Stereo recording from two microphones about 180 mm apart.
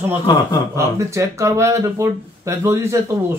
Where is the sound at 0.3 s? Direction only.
25° left (ahead or behind).